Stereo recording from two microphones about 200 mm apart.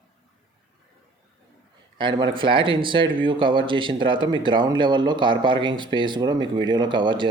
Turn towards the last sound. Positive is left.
turn(degrees=-25)  # may be behind; listen again after turning